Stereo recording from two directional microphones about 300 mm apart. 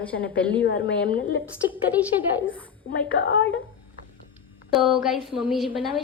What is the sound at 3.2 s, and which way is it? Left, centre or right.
Speech, left.